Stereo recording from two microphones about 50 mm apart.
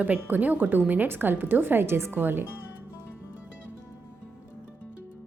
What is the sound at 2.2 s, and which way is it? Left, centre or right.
Speech, right.